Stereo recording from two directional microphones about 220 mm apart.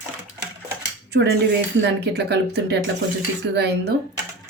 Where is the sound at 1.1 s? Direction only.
50° right (ahead or behind).